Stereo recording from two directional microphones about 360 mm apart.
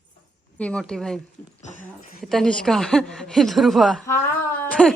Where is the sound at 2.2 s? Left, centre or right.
Centre.